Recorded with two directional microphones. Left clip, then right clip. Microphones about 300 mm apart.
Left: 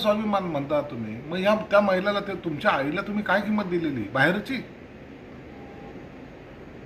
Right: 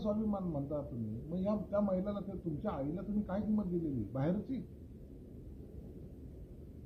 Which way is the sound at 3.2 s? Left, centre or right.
Centre.